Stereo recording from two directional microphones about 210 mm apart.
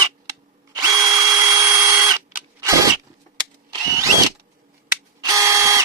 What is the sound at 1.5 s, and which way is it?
Drill, 15° right (ahead or behind).